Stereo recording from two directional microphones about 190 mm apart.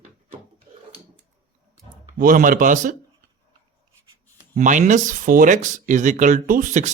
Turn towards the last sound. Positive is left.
turn(degrees=-40)  # may be behind; listen again after turning